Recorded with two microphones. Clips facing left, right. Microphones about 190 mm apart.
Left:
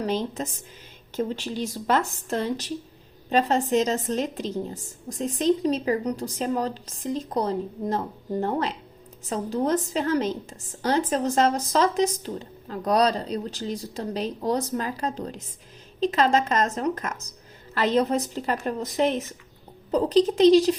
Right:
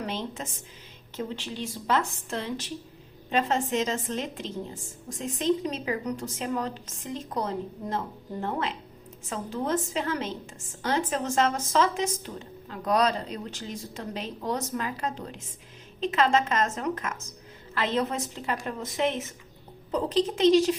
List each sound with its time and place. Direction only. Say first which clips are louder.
0.0 s a woman's voice: left 6 dB; 40° left (ahead or behind)